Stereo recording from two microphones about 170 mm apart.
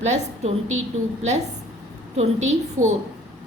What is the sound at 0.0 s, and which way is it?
Speech, 40° right (ahead or behind).